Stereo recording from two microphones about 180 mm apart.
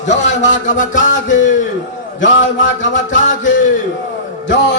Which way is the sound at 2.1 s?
90° left.